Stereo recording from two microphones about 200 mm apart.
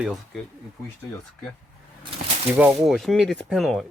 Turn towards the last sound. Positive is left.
turn(degrees=0)  # may be behind; listen again after turning